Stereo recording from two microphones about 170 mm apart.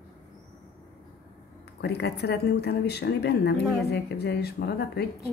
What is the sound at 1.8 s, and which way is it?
Speech, 75° left (ahead or behind).